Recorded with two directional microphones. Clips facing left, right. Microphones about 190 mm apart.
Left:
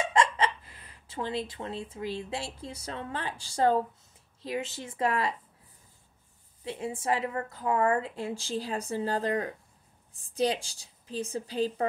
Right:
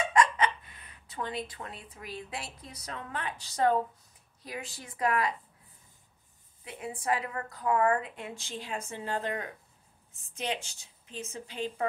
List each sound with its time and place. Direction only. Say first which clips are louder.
0.1 s a woman's voice: right 1 dB; 25° left (ahead or behind)
6.6 s a woman's voice: left 4 dB; 30° left (ahead or behind)